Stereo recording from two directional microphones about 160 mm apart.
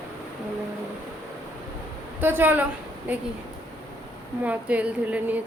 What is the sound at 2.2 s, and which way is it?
Speech, 10° right (ahead or behind).